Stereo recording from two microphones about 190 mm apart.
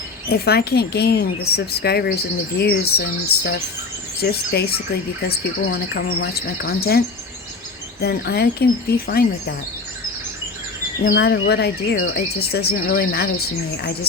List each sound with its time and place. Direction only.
0.3 s speech: 55° left (ahead or behind)
8.0 s speech: 55° left (ahead or behind)
11.0 s speech: 60° left (ahead or behind)